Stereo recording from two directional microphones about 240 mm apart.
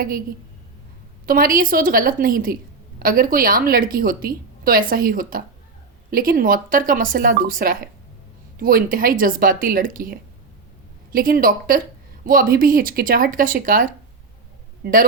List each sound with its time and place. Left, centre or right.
1.3 s a woman's voice: right